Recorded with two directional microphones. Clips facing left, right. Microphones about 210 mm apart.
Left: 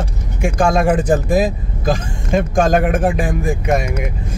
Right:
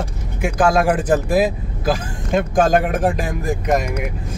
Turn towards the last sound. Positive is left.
turn(degrees=5)  # may be behind; listen again after turning